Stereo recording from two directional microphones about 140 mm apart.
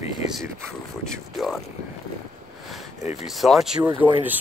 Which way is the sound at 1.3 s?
Centre (ahead or behind).